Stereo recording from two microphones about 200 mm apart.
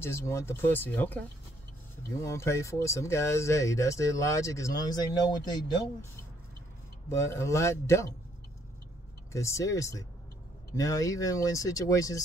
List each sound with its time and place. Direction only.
0.0 s speech: 15° left (ahead or behind)
2.2 s speech: 15° left (ahead or behind)
7.1 s speech: 15° left (ahead or behind)
9.3 s speech: 15° left (ahead or behind)